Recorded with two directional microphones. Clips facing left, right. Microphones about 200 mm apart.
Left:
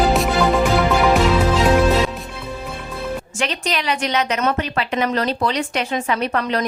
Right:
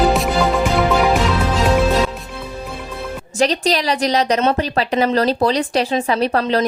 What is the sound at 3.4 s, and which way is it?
A woman's voice, 35° right (ahead or behind).